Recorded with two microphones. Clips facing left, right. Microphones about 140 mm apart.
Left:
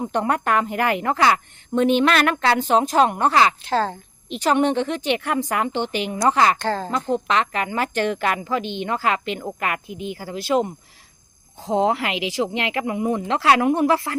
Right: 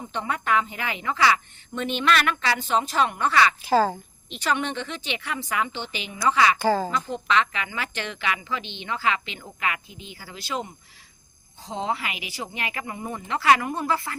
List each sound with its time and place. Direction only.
0.0 s a woman's voice: 50° left (ahead or behind)
3.6 s speech: 10° right (ahead or behind)
4.3 s a woman's voice: 50° left (ahead or behind)
6.6 s speech: 5° right (ahead or behind)
6.9 s a woman's voice: 45° left (ahead or behind); by 14.2 s 80° left